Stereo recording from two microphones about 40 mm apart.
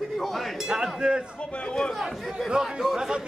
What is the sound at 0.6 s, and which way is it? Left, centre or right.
Speech, centre.